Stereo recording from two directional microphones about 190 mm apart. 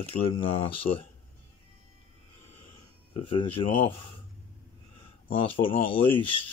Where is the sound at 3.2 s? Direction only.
30° left (ahead or behind).